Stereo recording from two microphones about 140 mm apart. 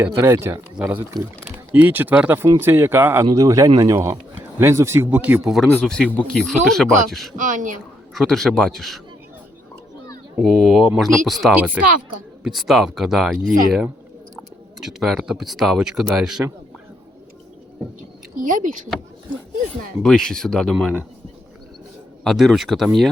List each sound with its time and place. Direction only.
0.0 s speech: 20° right (ahead or behind); by 5.6 s 5° right (ahead or behind)
5.7 s speech: 5° left (ahead or behind)
7.3 s speech: 65° right (ahead or behind)
8.1 s speech: centre (ahead or behind)
10.3 s speech: centre (ahead or behind)
11.5 s speech: 10° right (ahead or behind)
18.3 s speech: 70° right (ahead or behind)
20.0 s speech: 5° left (ahead or behind)
22.2 s speech: centre (ahead or behind)